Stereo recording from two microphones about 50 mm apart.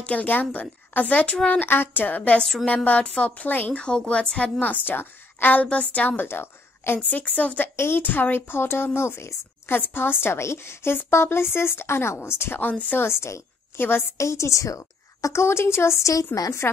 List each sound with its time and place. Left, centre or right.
0.0 s a woman's voice: left
1.7 s a woman's voice: left
3.7 s a woman's voice: centre
6.2 s a woman's voice: left
7.0 s a woman's voice: left
7.7 s a woman's voice: left
8.0 s a woman's voice: left
9.8 s a woman's voice: left
12.5 s a woman's voice: left
13.0 s a woman's voice: left
13.7 s a woman's voice: left
14.1 s a woman's voice: left
16.3 s a woman's voice: left